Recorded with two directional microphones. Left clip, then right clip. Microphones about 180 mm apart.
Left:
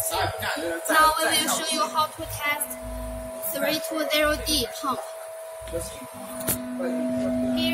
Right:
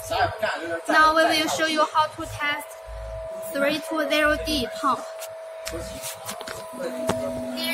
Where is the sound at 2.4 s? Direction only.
25° right (ahead or behind).